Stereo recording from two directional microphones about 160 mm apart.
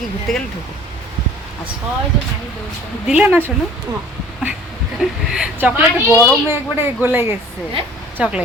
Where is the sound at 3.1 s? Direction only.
10° right (ahead or behind).